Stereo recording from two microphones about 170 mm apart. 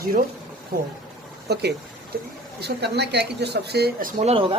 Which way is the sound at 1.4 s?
75° right (ahead or behind).